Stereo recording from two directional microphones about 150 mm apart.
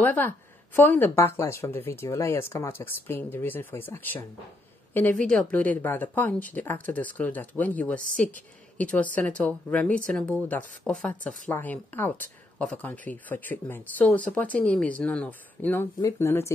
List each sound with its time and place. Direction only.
0.0 s speech: 10° left (ahead or behind)